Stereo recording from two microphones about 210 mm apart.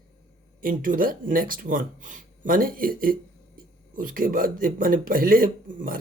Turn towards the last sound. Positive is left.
turn(degrees=-40)  # may be behind; listen again after turning